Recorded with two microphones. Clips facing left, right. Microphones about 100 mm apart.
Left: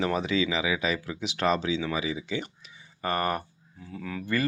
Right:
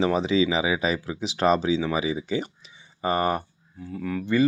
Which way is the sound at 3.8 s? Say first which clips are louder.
Right 6 dB; 5° right (ahead or behind).